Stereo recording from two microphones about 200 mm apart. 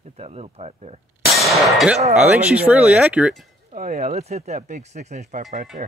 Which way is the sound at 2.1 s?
5° right (ahead or behind).